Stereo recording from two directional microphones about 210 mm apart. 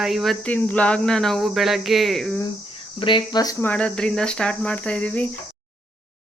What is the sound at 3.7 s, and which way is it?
Speech, 5° left (ahead or behind).